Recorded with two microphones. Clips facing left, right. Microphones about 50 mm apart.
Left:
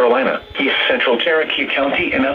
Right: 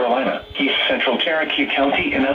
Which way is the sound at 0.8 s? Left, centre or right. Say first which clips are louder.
Left 4 dB; left.